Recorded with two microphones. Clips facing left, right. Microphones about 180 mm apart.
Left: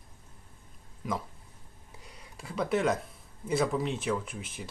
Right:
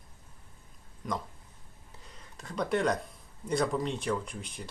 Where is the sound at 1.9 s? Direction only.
10° left (ahead or behind).